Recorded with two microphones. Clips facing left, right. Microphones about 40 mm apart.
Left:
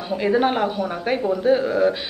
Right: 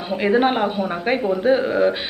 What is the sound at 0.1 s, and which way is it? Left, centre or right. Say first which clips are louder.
Speech: right 2 dB; right.